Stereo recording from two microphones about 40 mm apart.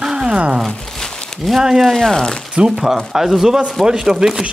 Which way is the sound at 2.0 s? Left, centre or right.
Centre.